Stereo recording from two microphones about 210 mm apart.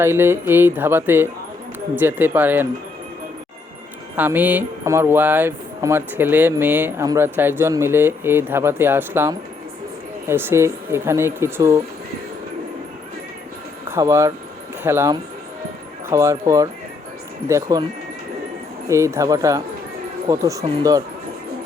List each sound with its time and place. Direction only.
0.0 s speech: 10° right (ahead or behind)
4.2 s speech: 10° right (ahead or behind)
13.8 s speech: 10° right (ahead or behind)
18.9 s speech: 15° right (ahead or behind)